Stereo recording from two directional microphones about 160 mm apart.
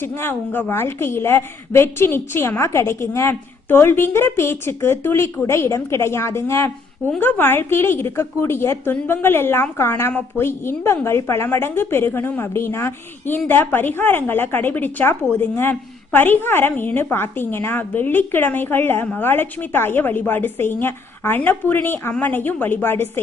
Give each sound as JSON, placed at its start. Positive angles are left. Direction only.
{"t": 0.0, "sound": "a woman's voice", "side_deg": 15}